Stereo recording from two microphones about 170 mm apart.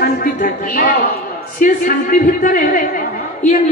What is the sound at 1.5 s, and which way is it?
A woman's voice, 55° left (ahead or behind).